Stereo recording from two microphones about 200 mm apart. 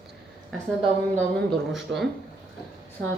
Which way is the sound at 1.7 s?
Centre (ahead or behind).